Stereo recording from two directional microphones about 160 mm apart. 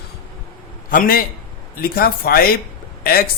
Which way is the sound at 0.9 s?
60° left (ahead or behind).